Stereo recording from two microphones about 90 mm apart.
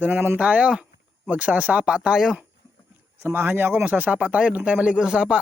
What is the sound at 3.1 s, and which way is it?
Speech, 20° right (ahead or behind).